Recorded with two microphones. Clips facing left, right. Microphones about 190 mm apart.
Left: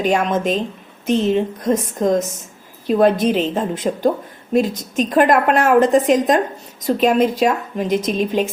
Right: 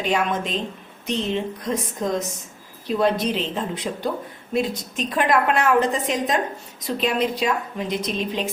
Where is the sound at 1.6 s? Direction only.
45° left (ahead or behind).